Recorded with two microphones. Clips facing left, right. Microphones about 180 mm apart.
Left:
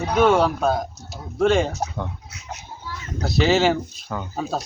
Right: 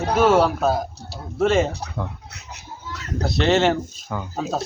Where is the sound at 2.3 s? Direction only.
70° right (ahead or behind).